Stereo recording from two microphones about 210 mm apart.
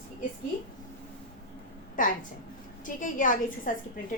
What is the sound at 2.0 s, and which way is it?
A woman's voice, 40° left (ahead or behind).